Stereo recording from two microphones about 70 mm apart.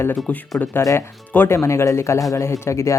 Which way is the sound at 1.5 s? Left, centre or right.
Left.